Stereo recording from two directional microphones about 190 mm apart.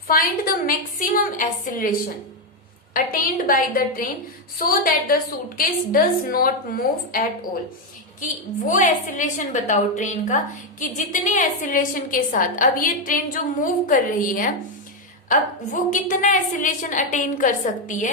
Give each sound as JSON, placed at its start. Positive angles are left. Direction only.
{"t": 0.1, "sound": "a woman's voice", "side_deg": 50}
{"t": 2.9, "sound": "a woman's voice", "side_deg": 50}
{"t": 8.6, "sound": "a woman's voice", "side_deg": 45}